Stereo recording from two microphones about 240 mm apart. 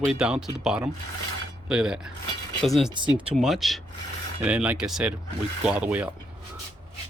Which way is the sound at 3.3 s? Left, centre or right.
Centre.